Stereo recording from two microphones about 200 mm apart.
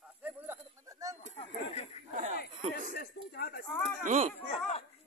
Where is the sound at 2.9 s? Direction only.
50° left (ahead or behind).